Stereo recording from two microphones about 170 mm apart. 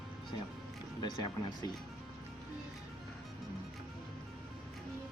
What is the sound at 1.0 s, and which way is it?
Speech, 25° left (ahead or behind).